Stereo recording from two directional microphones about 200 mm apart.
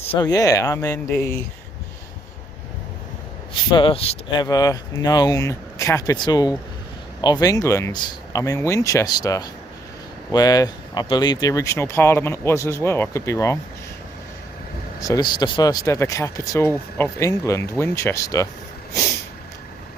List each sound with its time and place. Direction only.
0.1 s speech: 20° left (ahead or behind)
3.7 s speech: 25° left (ahead or behind)
15.0 s speech: 20° left (ahead or behind)